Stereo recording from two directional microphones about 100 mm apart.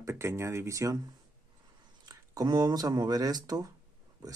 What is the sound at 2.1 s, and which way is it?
Speech, 40° right (ahead or behind).